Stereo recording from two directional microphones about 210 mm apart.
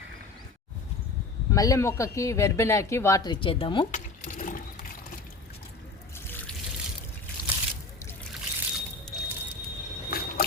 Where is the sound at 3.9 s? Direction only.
40° left (ahead or behind).